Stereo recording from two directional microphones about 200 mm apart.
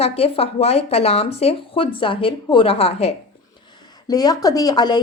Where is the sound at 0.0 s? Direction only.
30° left (ahead or behind).